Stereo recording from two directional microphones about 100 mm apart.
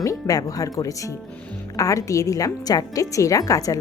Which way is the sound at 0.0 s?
35° left (ahead or behind).